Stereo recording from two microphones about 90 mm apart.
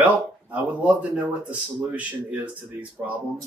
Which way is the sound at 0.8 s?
15° right (ahead or behind).